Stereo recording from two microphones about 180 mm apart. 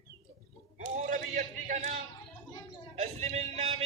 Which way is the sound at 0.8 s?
45° right (ahead or behind).